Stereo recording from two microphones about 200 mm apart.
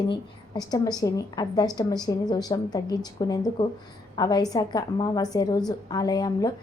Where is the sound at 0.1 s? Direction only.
20° left (ahead or behind).